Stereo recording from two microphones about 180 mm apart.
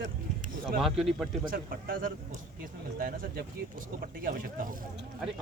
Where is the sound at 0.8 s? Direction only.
Centre (ahead or behind).